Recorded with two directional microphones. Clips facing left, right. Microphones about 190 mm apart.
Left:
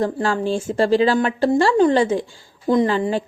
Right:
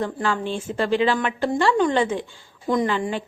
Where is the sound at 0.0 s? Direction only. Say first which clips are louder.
Left 4 dB; 35° left (ahead or behind).